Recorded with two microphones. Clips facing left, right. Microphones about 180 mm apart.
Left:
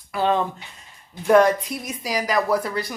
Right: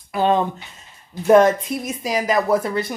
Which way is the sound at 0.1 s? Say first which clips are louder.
Right 3 dB; 20° right (ahead or behind).